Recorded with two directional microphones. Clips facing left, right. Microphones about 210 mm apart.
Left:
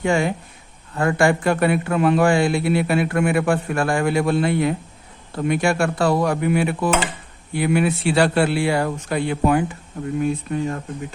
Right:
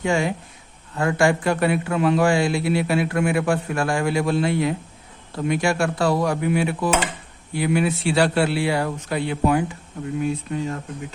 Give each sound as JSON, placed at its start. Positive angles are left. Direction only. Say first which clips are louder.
{"t": 0.0, "sound": "a man's voice", "louder": "left 2 dB", "side_deg": 55}